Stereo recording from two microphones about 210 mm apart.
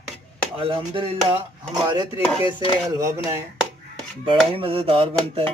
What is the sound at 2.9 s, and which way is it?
Speech, 15° right (ahead or behind).